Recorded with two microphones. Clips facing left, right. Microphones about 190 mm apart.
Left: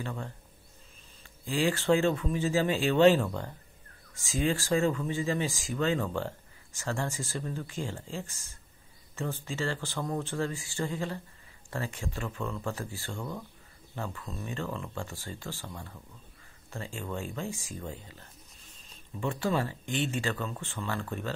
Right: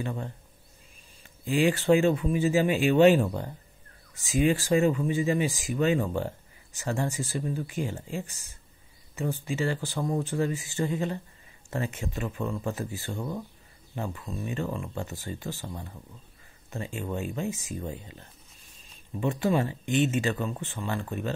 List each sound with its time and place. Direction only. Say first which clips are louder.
0.0 s speech: right 4 dB; 20° right (ahead or behind)
1.4 s speech: right 4 dB; 20° right (ahead or behind)